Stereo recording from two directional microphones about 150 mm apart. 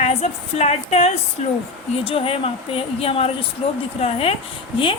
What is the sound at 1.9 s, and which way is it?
A woman's voice, 35° left (ahead or behind).